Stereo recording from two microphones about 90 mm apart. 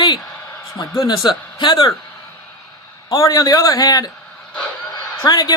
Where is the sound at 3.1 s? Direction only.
40° left (ahead or behind).